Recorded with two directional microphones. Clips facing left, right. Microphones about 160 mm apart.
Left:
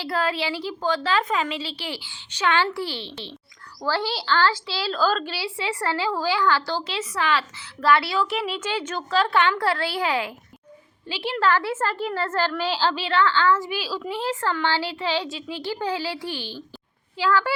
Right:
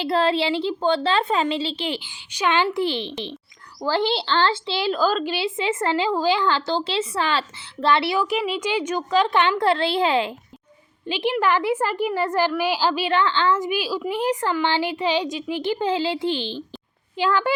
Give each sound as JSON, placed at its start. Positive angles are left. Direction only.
{"t": 0.0, "sound": "a woman's voice", "side_deg": -25}
{"t": 8.4, "sound": "a woman's voice", "side_deg": -10}